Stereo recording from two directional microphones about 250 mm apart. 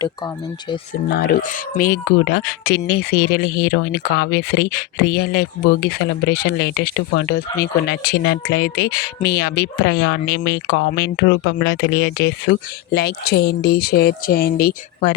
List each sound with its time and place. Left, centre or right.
1.0 s speech: left